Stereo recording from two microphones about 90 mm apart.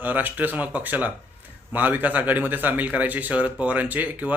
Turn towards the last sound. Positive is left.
turn(degrees=-20)  # may be behind; listen again after turning